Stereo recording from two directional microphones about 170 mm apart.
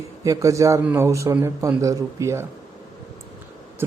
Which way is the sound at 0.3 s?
20° right (ahead or behind).